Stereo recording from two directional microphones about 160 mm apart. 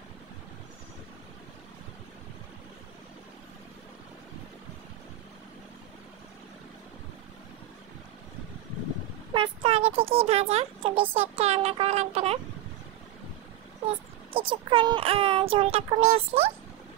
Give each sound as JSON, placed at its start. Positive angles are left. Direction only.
{"t": 9.3, "sound": "speech", "side_deg": -35}
{"t": 14.3, "sound": "speech", "side_deg": -35}